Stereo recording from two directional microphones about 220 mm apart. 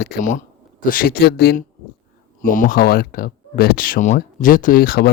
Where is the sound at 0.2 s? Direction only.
35° left (ahead or behind).